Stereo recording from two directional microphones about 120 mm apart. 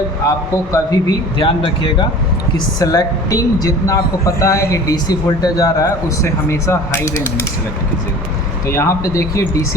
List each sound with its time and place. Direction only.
0.3 s speech: 25° left (ahead or behind)
1.4 s speech: 45° left (ahead or behind)
2.7 s speech: 30° left (ahead or behind)
8.6 s speech: 25° left (ahead or behind)